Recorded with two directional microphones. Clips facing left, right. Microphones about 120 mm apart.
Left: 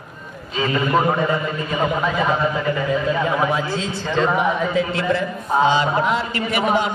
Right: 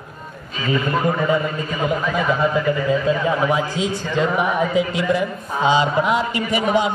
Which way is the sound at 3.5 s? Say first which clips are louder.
Right 2 dB; 15° right (ahead or behind).